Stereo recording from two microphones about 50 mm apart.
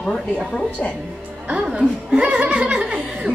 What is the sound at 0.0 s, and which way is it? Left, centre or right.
Speech, centre.